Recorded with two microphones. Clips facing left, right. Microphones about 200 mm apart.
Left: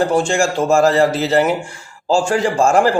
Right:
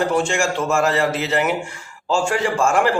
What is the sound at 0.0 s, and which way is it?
A man's voice, 35° left (ahead or behind).